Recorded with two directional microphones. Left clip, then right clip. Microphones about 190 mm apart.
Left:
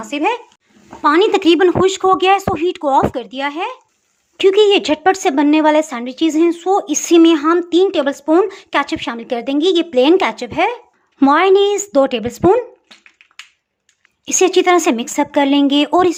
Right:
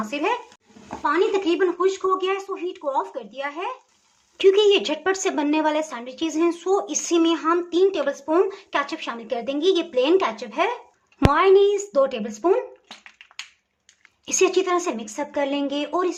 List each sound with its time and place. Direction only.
0.0 s a woman's voice: 35° left (ahead or behind)
1.0 s speech: 45° left (ahead or behind)
4.4 s a woman's voice: 30° left (ahead or behind)
14.3 s speech: 35° left (ahead or behind)